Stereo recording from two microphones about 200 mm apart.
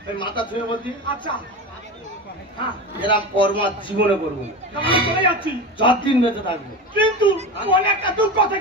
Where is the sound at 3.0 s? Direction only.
25° left (ahead or behind).